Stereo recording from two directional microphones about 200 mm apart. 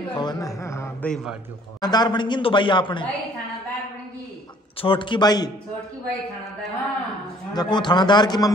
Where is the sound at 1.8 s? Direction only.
20° left (ahead or behind).